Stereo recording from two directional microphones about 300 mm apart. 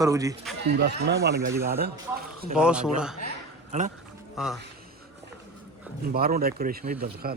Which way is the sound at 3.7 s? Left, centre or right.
Right.